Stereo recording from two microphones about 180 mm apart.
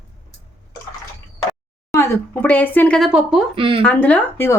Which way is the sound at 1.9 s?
15° left (ahead or behind).